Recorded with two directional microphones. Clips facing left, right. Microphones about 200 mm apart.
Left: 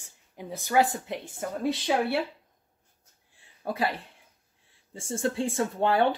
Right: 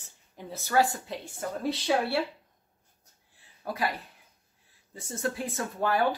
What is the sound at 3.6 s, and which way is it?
Speech, 30° left (ahead or behind).